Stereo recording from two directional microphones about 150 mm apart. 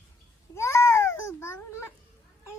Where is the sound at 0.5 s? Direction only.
20° left (ahead or behind).